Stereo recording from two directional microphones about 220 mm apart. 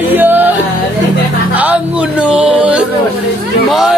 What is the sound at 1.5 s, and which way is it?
Music, 5° right (ahead or behind).